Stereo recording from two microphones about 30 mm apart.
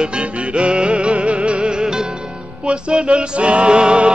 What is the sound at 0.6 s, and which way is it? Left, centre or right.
Music, right.